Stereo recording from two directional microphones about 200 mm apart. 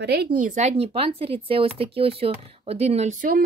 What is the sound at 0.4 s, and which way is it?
Speech, 35° right (ahead or behind).